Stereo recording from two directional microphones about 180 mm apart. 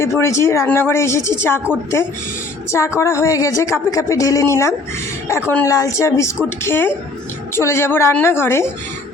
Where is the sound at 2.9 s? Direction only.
15° left (ahead or behind).